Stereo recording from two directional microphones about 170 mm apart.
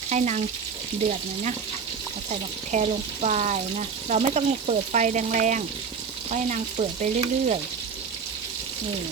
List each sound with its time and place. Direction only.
0.1 s frying: 45° right (ahead or behind)
2.3 s speech: 45° right (ahead or behind)
6.3 s frying: 45° right (ahead or behind)